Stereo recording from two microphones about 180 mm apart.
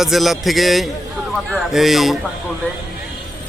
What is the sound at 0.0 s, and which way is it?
A man's voice, centre (ahead or behind).